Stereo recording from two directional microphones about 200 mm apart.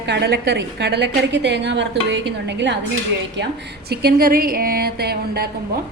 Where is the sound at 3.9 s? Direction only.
50° right (ahead or behind).